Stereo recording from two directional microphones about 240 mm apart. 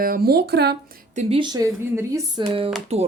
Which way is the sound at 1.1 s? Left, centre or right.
Right.